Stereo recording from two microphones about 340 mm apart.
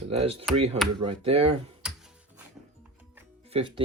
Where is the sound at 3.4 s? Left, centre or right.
Centre.